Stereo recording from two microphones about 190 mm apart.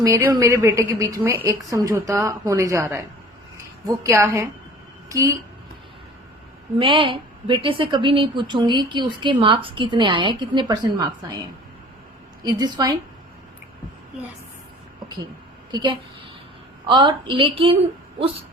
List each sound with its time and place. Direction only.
0.0 s a woman's voice: 15° right (ahead or behind)
6.7 s a woman's voice: 25° right (ahead or behind)
12.5 s a woman's voice: 20° right (ahead or behind)
15.7 s a woman's voice: 25° right (ahead or behind)